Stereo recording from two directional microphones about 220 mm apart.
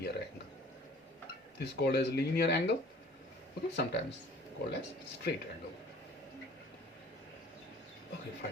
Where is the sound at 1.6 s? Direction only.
50° left (ahead or behind).